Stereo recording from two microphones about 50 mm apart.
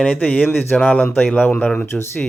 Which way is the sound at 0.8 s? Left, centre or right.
Left.